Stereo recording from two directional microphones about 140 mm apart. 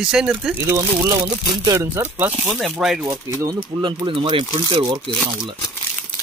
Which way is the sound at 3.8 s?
35° right (ahead or behind).